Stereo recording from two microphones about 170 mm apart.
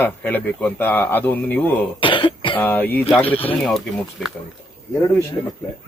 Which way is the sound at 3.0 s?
35° left (ahead or behind).